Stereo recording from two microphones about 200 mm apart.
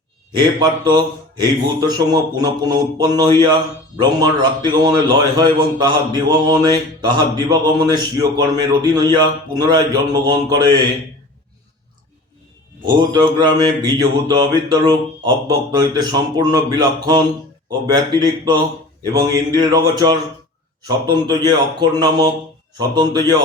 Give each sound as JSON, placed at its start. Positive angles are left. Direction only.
{"t": 0.3, "sound": "speech", "side_deg": -20}
{"t": 12.8, "sound": "speech", "side_deg": -20}